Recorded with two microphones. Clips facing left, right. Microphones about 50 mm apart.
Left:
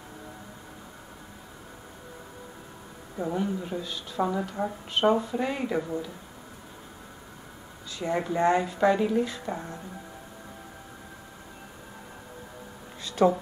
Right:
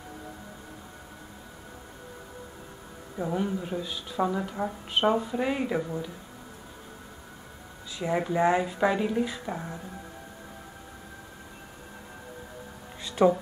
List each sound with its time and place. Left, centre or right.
3.2 s speech: centre
8.0 s speech: centre
13.0 s a sound: centre